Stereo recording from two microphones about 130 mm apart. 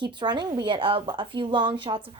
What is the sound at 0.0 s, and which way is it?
A woman's voice, 35° right (ahead or behind).